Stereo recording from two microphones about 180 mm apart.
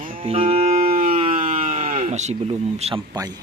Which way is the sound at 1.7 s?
35° right (ahead or behind).